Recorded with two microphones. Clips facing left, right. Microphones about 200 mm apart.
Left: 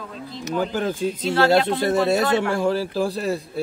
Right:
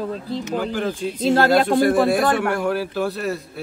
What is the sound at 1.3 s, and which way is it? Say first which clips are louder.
Speech: right 2 dB; 45° right (ahead or behind).